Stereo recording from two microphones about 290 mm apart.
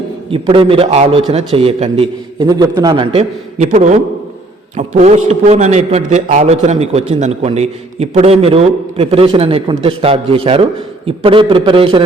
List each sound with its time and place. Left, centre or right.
0.3 s a man's voice: centre